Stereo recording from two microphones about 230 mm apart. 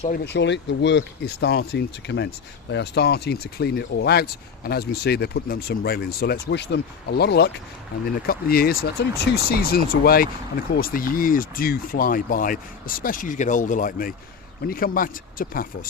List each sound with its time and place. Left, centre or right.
0.3 s speech: left